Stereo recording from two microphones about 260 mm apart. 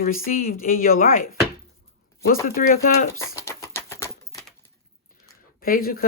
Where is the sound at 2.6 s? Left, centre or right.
Left.